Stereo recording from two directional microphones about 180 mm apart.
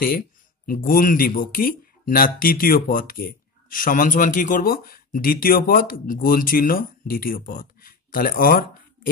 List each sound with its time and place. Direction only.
0.7 s speech: 50° left (ahead or behind)